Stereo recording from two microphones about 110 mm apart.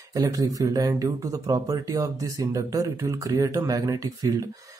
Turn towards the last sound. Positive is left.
turn(degrees=-35)  # may be behind; listen again after turning